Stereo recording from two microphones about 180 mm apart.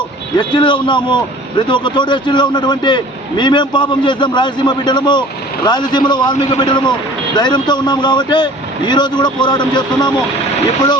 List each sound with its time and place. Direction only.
0.3 s a man's voice: 25° left (ahead or behind)